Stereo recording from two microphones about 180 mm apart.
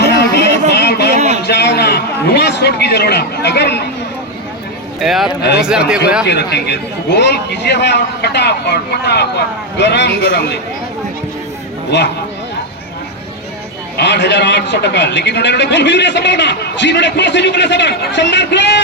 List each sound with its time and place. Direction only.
0.0 s music: 65° left (ahead or behind)
0.7 s a sound: 65° left (ahead or behind)
1.1 s a sound: 40° right (ahead or behind)
1.5 s a man's voice: 65° left (ahead or behind)
4.9 s a man's voice: centre (ahead or behind)
6.2 s a man's voice: 70° left (ahead or behind)
11.9 s a man's voice: 75° left (ahead or behind)
13.9 s a man's voice: 70° left (ahead or behind)